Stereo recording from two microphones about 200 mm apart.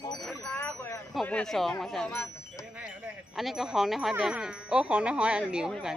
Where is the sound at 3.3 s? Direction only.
Centre (ahead or behind).